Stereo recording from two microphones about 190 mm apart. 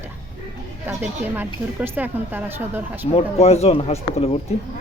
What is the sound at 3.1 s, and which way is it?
A man's voice, 35° left (ahead or behind).